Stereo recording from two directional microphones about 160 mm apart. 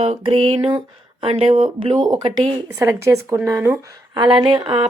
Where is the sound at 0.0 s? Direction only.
35° right (ahead or behind); by 3.8 s 15° right (ahead or behind).